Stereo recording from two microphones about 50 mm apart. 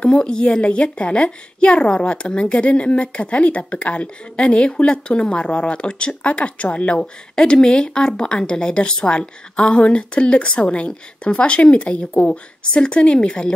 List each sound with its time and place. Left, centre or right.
0.2 s a woman's voice: left
7.0 s a woman's voice: centre